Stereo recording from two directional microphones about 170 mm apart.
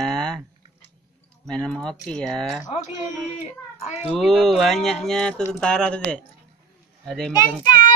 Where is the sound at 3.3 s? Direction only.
40° left (ahead or behind).